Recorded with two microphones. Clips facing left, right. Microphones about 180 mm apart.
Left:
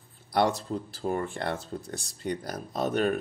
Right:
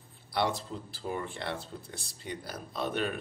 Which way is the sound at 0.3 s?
45° left (ahead or behind).